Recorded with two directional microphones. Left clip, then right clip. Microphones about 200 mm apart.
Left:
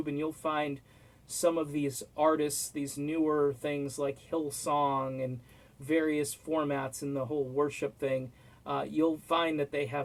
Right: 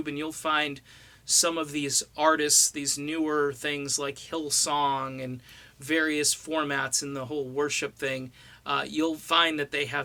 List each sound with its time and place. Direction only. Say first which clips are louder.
0.0 s speech: right 2 dB; 10° right (ahead or behind)
3.7 s speech: right 3 dB; 10° right (ahead or behind)